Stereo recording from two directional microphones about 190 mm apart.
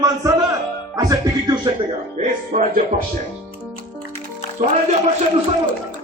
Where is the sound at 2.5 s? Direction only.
40° right (ahead or behind).